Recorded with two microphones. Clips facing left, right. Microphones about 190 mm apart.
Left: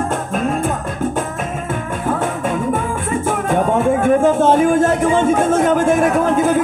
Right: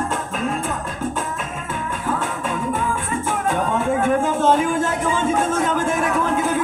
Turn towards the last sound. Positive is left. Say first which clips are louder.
# left 6 dB
turn(degrees=45)  # may be behind; listen again after turning